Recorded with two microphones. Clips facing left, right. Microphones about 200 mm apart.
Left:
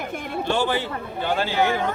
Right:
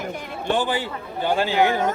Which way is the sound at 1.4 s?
15° right (ahead or behind).